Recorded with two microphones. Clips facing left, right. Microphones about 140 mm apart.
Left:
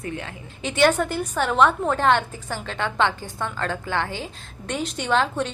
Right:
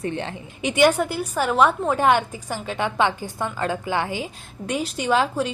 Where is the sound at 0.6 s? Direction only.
15° right (ahead or behind).